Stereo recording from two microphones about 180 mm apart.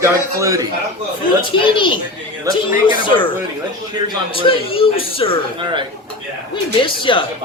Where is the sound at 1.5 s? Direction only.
25° left (ahead or behind).